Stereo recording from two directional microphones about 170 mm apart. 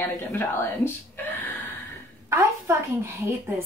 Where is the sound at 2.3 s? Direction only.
15° right (ahead or behind).